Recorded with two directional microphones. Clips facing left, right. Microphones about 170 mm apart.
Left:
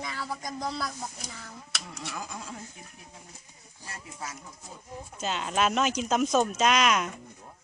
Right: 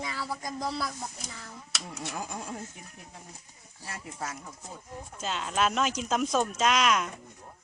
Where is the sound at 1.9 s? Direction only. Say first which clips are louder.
Right 2 dB; 45° right (ahead or behind).